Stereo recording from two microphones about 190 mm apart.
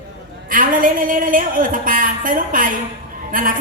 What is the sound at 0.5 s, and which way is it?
A woman's voice, 45° right (ahead or behind).